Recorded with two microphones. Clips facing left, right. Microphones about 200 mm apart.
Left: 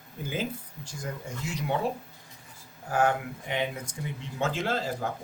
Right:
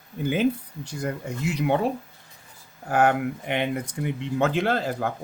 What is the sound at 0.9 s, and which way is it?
Speech, 65° right (ahead or behind).